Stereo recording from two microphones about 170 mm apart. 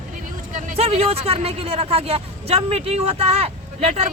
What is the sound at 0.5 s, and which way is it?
Speech, 35° right (ahead or behind).